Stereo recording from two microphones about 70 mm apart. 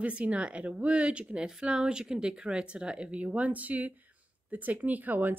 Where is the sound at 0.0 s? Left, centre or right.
Centre.